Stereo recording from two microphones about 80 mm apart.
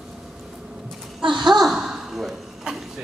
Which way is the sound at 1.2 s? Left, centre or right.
Right.